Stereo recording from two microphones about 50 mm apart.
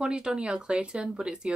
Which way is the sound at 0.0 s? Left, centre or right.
Centre.